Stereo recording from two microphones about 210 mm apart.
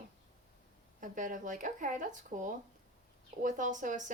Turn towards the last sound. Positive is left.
turn(degrees=-35)  # may be behind; listen again after turning